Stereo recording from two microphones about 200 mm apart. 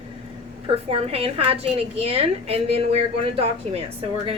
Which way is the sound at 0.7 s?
30° right (ahead or behind).